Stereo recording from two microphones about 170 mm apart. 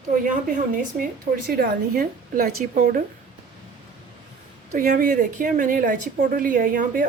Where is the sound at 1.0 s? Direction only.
60° right (ahead or behind).